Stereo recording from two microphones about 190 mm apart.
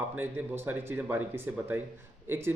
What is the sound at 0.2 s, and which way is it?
A man's voice, 10° right (ahead or behind).